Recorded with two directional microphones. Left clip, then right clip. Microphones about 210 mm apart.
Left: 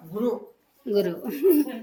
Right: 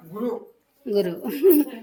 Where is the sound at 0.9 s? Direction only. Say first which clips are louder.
Right 1 dB; 15° right (ahead or behind).